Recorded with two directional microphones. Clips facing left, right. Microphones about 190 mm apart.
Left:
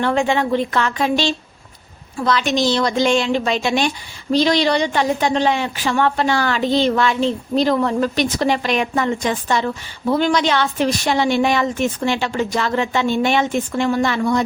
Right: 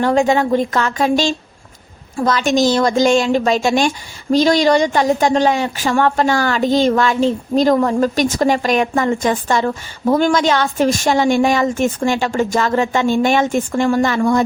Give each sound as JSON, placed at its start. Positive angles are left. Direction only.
{"t": 0.0, "sound": "a woman's voice", "side_deg": -40}